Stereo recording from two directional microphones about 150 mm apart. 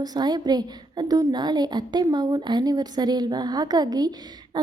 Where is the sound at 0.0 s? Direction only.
25° right (ahead or behind).